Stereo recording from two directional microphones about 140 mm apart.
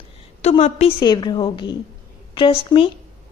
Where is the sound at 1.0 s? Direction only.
30° left (ahead or behind).